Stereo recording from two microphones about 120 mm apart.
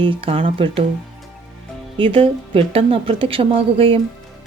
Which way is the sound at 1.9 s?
50° right (ahead or behind).